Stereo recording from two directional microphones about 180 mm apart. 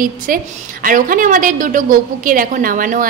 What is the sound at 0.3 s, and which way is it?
A woman's voice, 50° right (ahead or behind).